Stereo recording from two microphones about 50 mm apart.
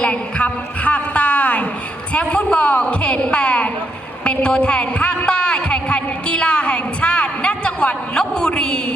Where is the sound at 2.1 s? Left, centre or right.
Left.